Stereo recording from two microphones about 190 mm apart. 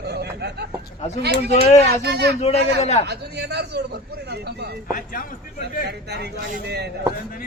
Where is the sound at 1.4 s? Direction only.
35° left (ahead or behind).